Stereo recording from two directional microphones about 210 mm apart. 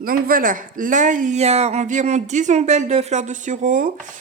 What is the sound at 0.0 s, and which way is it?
Speech, 45° right (ahead or behind).